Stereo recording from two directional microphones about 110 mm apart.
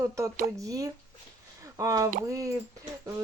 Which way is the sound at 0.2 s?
30° right (ahead or behind).